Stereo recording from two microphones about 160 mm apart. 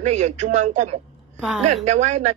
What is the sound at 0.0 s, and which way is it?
A woman's voice, 45° right (ahead or behind).